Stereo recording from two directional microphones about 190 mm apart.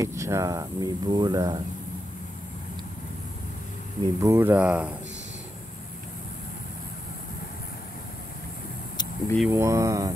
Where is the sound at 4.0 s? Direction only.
15° right (ahead or behind).